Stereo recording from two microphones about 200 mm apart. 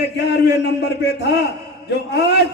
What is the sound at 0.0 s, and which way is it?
A man's voice, 55° left (ahead or behind).